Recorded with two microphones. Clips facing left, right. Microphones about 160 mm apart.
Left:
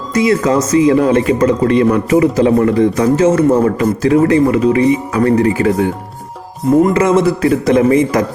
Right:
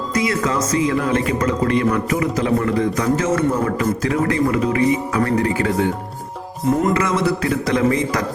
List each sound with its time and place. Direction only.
0.1 s speech: 30° left (ahead or behind)
6.9 s speech: 25° left (ahead or behind)